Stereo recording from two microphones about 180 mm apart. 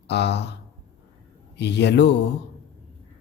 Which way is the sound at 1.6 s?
70° left (ahead or behind).